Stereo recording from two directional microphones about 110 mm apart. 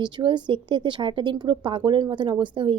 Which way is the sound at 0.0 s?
45° right (ahead or behind).